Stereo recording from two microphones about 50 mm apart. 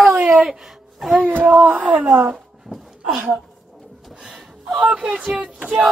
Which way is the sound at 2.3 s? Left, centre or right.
Centre.